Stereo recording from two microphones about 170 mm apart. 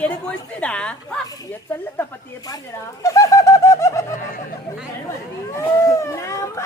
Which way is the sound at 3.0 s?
20° left (ahead or behind).